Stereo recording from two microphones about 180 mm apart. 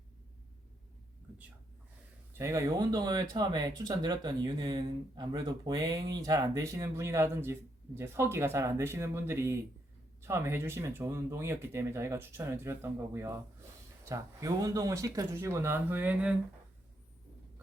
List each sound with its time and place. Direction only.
2.4 s speech: 15° right (ahead or behind)